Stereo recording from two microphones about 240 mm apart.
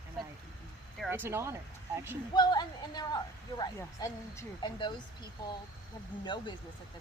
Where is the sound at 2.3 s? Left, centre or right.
Centre.